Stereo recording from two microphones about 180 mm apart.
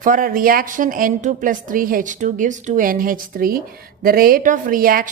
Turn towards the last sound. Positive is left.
turn(degrees=-50)  # may be behind; listen again after turning